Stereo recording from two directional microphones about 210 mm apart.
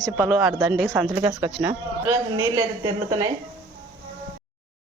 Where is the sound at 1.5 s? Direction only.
10° right (ahead or behind).